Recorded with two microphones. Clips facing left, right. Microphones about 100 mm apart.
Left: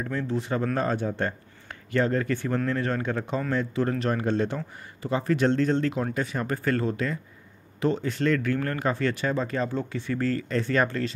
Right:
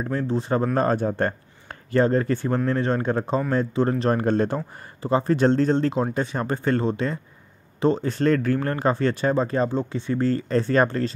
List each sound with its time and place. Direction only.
0.0 s speech: 35° right (ahead or behind)
5.0 s speech: 35° right (ahead or behind)